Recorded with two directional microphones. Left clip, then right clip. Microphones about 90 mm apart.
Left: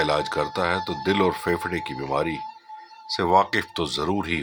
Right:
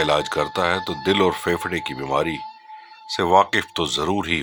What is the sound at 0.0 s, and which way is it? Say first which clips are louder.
Speech: right 3 dB; 40° right (ahead or behind).